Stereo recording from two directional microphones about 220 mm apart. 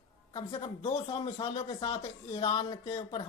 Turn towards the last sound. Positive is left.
turn(degrees=15)  # may be behind; listen again after turning